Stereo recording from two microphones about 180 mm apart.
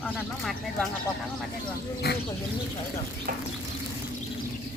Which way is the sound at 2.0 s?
60° left (ahead or behind).